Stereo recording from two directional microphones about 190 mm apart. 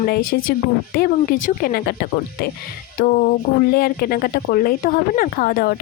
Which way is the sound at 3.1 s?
45° left (ahead or behind).